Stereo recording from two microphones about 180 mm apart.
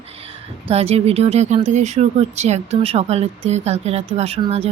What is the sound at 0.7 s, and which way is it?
Speech, 35° right (ahead or behind).